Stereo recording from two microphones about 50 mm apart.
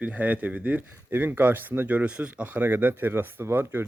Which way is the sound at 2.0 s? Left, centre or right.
Right.